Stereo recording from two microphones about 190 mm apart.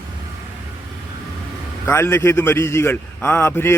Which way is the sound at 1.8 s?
15° left (ahead or behind).